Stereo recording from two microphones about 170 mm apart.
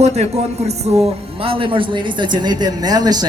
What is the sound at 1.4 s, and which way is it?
A woman's voice, 30° right (ahead or behind).